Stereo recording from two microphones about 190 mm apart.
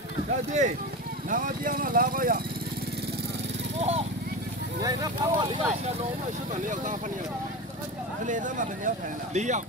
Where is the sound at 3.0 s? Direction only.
60° right (ahead or behind).